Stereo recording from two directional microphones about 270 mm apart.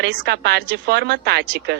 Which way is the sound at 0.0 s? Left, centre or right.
Right.